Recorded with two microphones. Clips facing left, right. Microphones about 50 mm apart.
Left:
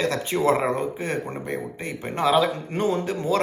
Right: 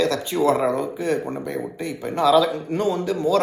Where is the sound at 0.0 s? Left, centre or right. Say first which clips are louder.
Right 2 dB; left.